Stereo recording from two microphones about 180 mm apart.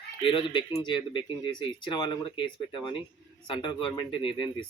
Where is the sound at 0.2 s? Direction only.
30° left (ahead or behind).